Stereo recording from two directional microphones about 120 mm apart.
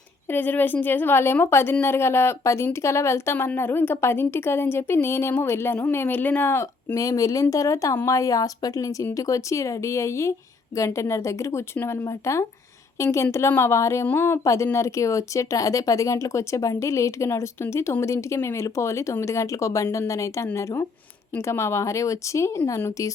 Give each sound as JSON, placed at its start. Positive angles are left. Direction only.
{"t": 0.3, "sound": "a woman's voice", "side_deg": 15}